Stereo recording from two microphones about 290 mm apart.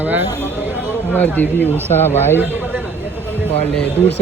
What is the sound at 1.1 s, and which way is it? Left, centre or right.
Speech, centre.